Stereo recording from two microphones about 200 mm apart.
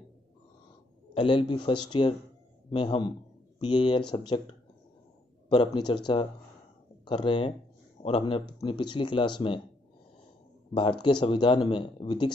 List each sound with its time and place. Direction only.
1.1 s speech: 25° left (ahead or behind)
7.1 s speech: 25° left (ahead or behind)
10.7 s speech: 25° left (ahead or behind)